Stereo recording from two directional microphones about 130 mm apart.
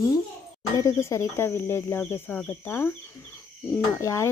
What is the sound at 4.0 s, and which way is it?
Speech, 20° left (ahead or behind).